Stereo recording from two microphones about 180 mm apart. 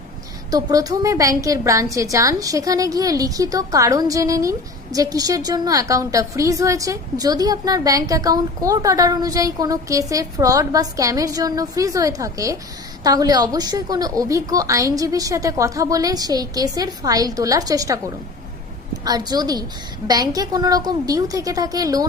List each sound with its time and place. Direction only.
0.5 s a woman's voice: 20° right (ahead or behind)
19.0 s a woman's voice: 20° right (ahead or behind)